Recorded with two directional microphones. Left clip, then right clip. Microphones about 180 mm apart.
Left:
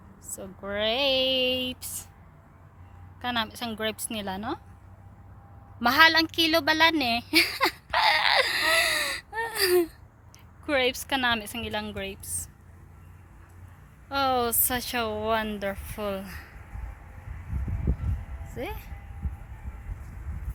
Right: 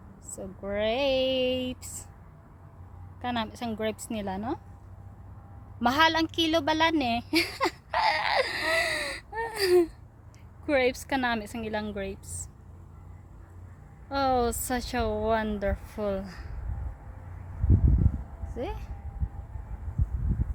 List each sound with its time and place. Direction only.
0.3 s speech: centre (ahead or behind)
3.2 s speech: 5° right (ahead or behind)
5.8 s a sound: 10° left (ahead or behind)
10.7 s speech: 5° right (ahead or behind)
14.1 s speech: 10° right (ahead or behind)
18.5 s speech: 5° right (ahead or behind)